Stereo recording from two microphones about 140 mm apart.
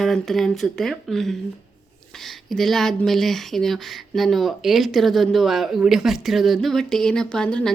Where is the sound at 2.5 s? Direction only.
Centre (ahead or behind).